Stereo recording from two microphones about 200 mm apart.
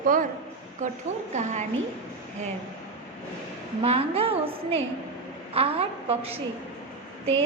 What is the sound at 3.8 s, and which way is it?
A woman's voice, 30° right (ahead or behind).